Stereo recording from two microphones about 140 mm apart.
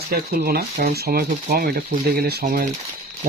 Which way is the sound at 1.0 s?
90° right.